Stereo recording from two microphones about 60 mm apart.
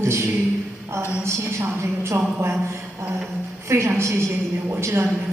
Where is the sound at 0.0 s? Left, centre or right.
Right.